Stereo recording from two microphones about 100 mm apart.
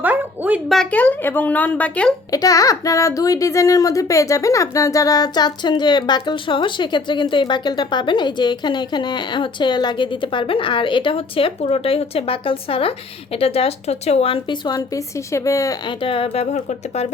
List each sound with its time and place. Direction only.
0.0 s a sound: 15° right (ahead or behind)
0.7 s speech: 10° left (ahead or behind)
2.3 s speech: 35° left (ahead or behind); by 12.9 s 65° left (ahead or behind)
13.3 s speech: 80° left; by 14.8 s 50° left (ahead or behind)
14.9 s speech: 30° left (ahead or behind)
15.9 s speech: 65° left (ahead or behind); by 16.5 s 80° left